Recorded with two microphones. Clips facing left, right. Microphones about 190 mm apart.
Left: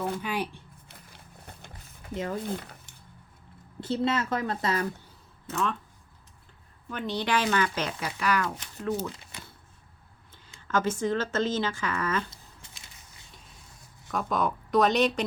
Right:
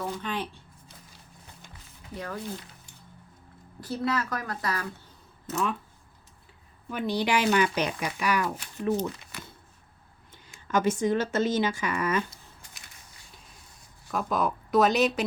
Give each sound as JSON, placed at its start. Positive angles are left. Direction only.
{"t": 0.0, "sound": "speech", "side_deg": 10}
{"t": 0.9, "sound": "a sound", "side_deg": 60}
{"t": 2.1, "sound": "a woman's voice", "side_deg": 20}
{"t": 3.8, "sound": "a woman's voice", "side_deg": 25}
{"t": 5.5, "sound": "speech", "side_deg": -5}
{"t": 6.9, "sound": "speech", "side_deg": -10}
{"t": 10.3, "sound": "speech", "side_deg": -15}
{"t": 12.3, "sound": "a sound", "side_deg": 25}
{"t": 14.1, "sound": "speech", "side_deg": 0}